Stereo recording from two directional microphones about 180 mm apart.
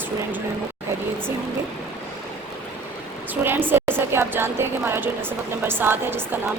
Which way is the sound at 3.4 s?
10° right (ahead or behind).